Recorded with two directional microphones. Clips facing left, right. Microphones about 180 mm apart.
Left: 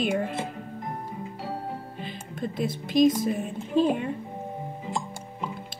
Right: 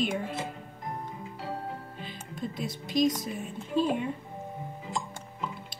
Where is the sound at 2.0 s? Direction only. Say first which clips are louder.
Left 4 dB; 50° left (ahead or behind).